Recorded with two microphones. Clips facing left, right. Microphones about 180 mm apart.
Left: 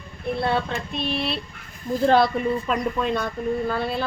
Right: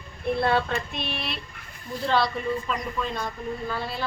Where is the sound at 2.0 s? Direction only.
55° left (ahead or behind).